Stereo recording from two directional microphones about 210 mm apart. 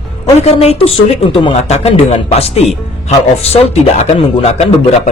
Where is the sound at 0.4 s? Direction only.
30° left (ahead or behind).